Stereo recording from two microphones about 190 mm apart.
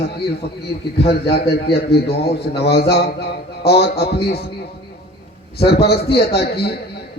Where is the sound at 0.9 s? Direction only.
60° left (ahead or behind).